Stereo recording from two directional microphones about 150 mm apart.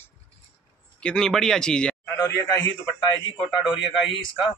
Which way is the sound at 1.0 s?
5° left (ahead or behind).